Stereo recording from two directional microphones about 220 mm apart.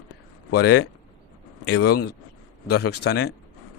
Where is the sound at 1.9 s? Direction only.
90° left.